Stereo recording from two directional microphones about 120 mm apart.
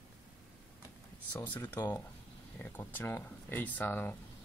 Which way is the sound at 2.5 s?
15° left (ahead or behind).